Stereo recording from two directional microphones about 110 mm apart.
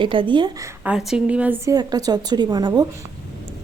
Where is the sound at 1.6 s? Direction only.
35° right (ahead or behind).